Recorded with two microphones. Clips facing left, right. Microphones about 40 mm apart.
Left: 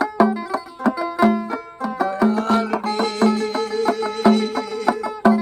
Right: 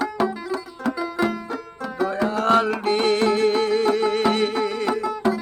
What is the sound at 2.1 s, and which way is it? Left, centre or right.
Music, right.